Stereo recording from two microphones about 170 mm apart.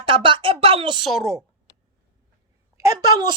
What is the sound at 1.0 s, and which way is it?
Speech, centre (ahead or behind).